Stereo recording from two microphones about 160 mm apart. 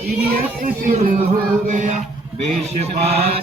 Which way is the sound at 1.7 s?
50° right (ahead or behind).